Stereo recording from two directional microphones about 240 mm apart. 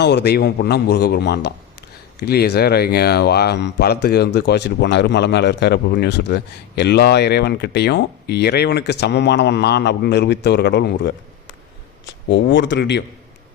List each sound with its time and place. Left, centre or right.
0.0 s a man's voice: left